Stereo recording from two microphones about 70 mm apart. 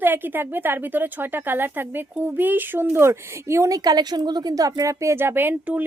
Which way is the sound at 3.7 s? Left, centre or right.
Right.